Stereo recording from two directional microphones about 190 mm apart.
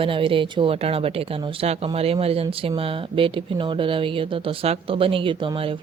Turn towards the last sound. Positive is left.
turn(degrees=-25)  # may be behind; listen again after turning